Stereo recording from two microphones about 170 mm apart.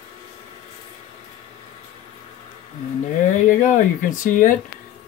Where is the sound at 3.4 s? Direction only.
50° left (ahead or behind).